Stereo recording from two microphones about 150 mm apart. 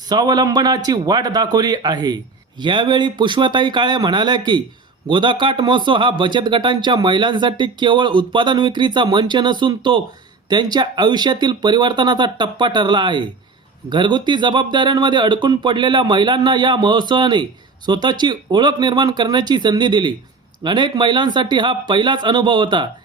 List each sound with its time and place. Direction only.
0.1 s speech: 25° right (ahead or behind)